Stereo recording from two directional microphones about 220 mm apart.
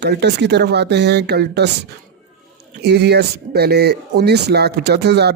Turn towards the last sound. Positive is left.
turn(degrees=-50)  # may be behind; listen again after turning